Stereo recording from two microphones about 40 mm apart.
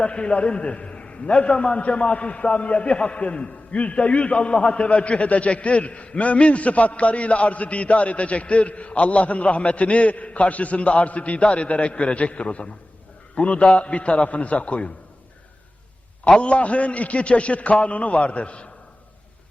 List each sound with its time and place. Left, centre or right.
0.0 s a man's voice: left
16.4 s a man's voice: left